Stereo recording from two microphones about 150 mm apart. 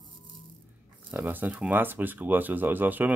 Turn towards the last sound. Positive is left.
turn(degrees=-10)  # may be behind; listen again after turning